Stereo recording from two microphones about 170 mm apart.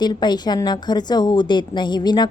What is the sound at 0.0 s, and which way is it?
A woman's voice, 25° left (ahead or behind).